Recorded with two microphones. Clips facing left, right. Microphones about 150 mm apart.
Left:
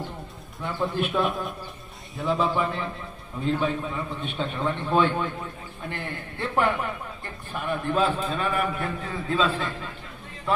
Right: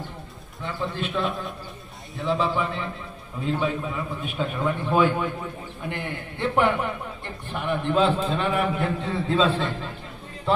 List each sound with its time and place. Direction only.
0.9 s a man's voice: 15° left (ahead or behind)
1.2 s a man's voice: centre (ahead or behind); by 9.8 s 30° right (ahead or behind)